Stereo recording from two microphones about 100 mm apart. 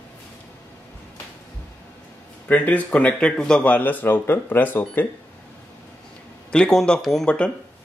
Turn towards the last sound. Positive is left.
turn(degrees=10)  # may be behind; listen again after turning